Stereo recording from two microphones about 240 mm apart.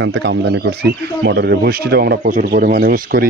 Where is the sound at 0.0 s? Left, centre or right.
Right.